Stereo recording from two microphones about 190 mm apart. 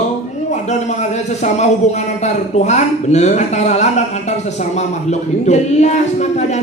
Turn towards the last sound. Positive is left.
turn(degrees=35)  # may be behind; listen again after turning